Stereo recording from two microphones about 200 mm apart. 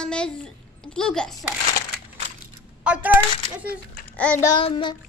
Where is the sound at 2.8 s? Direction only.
5° right (ahead or behind).